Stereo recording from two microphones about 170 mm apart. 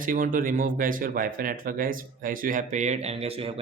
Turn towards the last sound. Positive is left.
turn(degrees=-35)  # may be behind; listen again after turning